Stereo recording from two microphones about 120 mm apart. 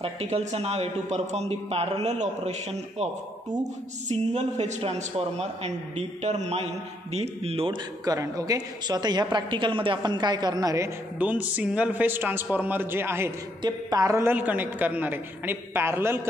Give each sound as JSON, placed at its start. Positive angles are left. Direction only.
{"t": 0.0, "sound": "speech", "side_deg": -60}
{"t": 4.1, "sound": "a man's voice", "side_deg": -70}
{"t": 8.0, "sound": "a woman's voice", "side_deg": -30}
{"t": 11.1, "sound": "a man's voice", "side_deg": -15}
{"t": 13.6, "sound": "a man's voice", "side_deg": -35}
{"t": 14.3, "sound": "a man's voice", "side_deg": -15}